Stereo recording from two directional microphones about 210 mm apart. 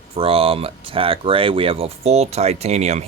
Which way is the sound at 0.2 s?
25° right (ahead or behind).